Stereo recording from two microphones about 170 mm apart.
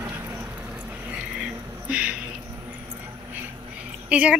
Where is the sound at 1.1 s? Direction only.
5° right (ahead or behind).